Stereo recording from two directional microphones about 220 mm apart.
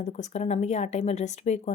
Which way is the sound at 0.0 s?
35° left (ahead or behind).